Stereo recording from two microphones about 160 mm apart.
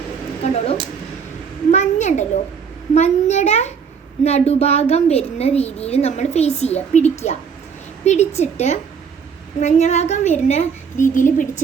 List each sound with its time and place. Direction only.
0.4 s speech: 40° left (ahead or behind)
1.7 s a sound: 45° left (ahead or behind)
2.9 s a woman's voice: 45° left (ahead or behind)